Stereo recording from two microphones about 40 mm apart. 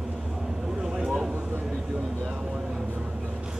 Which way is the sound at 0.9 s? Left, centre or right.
Centre.